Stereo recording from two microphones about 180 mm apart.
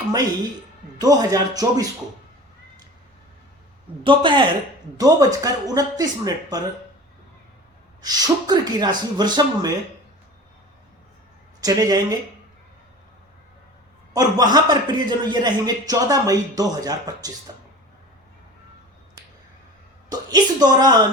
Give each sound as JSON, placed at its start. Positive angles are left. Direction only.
{"t": 0.9, "sound": "a man's voice", "side_deg": -20}
{"t": 4.0, "sound": "a man's voice", "side_deg": -30}
{"t": 8.0, "sound": "a man's voice", "side_deg": -20}
{"t": 11.6, "sound": "a man's voice", "side_deg": -20}
{"t": 14.1, "sound": "a man's voice", "side_deg": -20}
{"t": 20.1, "sound": "a man's voice", "side_deg": -20}